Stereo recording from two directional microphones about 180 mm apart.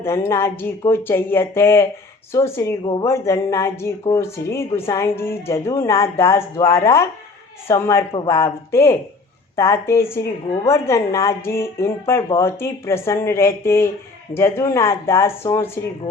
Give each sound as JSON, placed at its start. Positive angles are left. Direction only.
{"t": 0.0, "sound": "speech", "side_deg": 15}
{"t": 8.1, "sound": "speech", "side_deg": 25}
{"t": 8.4, "sound": "speech", "side_deg": 15}